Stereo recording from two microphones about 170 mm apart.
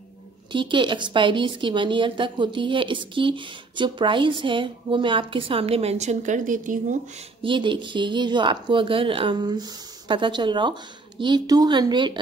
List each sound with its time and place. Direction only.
0.5 s a woman's voice: 30° right (ahead or behind); by 7.0 s 50° right (ahead or behind)
7.4 s a woman's voice: 30° right (ahead or behind)